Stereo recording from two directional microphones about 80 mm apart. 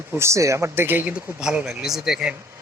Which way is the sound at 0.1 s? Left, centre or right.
Right.